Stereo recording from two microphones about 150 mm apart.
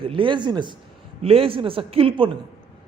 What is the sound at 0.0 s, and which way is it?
A man's voice, 35° right (ahead or behind).